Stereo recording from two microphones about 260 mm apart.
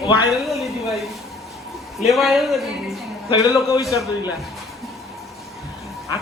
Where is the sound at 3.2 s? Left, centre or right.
Centre.